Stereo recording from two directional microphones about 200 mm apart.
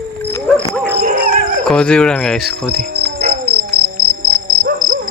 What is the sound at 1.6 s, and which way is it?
Cricket, 5° left (ahead or behind).